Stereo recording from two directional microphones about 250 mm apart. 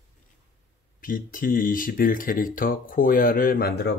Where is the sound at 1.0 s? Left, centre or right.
Left.